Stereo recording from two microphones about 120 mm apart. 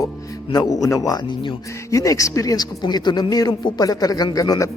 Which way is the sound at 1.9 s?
30° left (ahead or behind).